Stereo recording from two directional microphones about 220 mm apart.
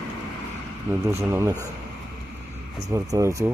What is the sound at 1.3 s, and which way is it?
Speech, 15° right (ahead or behind).